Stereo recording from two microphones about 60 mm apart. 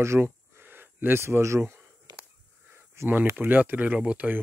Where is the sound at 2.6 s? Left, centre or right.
Right.